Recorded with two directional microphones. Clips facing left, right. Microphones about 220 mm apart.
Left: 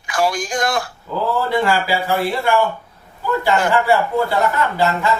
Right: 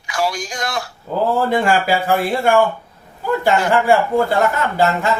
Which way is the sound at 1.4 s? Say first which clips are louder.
Right 2 dB; 50° right (ahead or behind).